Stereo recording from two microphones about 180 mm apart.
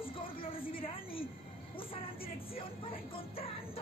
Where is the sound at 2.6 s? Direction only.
30° left (ahead or behind).